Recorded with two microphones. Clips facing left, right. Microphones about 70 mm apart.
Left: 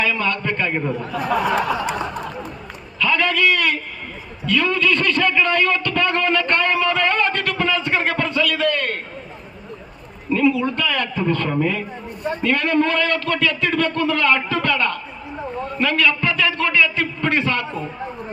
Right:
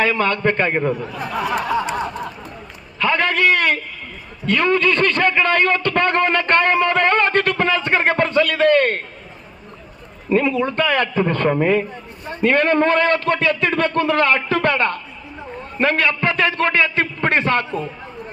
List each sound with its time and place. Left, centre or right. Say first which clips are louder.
0.0 s a man's voice: right 4 dB; right
3.0 s a man's voice: right 1 dB; right
10.3 s a man's voice: right 1 dB; right